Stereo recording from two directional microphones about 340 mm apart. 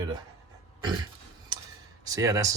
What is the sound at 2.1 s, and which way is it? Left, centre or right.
Speech, centre.